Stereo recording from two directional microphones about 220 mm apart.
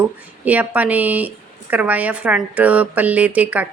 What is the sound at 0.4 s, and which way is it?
A woman's voice, 5° right (ahead or behind).